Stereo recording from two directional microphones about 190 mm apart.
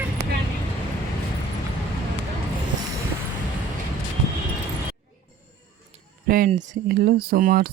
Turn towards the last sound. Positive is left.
turn(degrees=-50)  # may be behind; listen again after turning